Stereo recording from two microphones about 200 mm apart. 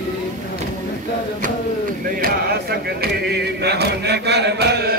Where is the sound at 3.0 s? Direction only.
55° right (ahead or behind).